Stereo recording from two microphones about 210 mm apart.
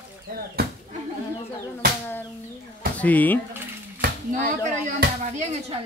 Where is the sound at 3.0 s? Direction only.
10° left (ahead or behind).